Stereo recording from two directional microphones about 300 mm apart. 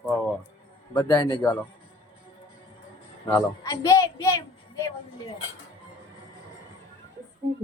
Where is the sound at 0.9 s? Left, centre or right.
Centre.